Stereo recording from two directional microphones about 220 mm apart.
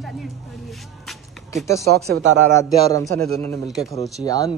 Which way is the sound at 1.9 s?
45° right (ahead or behind).